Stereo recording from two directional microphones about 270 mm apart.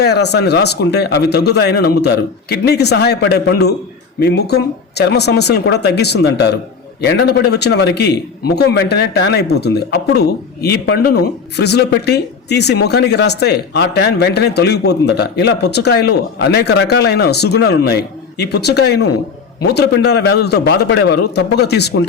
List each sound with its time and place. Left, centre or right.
0.0 s a man's voice: left